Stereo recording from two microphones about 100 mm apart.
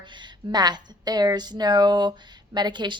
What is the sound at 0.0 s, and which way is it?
Speech, 50° right (ahead or behind).